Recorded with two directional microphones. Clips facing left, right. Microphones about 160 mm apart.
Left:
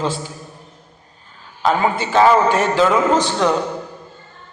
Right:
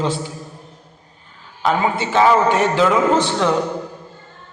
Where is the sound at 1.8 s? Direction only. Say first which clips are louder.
Left 2 dB; 20° right (ahead or behind).